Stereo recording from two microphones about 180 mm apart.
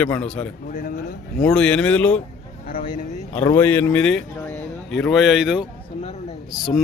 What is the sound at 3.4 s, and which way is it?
Speech, 10° left (ahead or behind).